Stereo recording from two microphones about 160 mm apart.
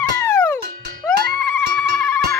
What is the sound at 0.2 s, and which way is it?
Music, 15° left (ahead or behind).